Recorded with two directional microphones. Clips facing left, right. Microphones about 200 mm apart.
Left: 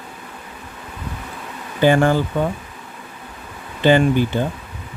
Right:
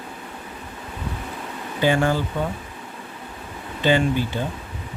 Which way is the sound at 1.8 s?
55° left (ahead or behind).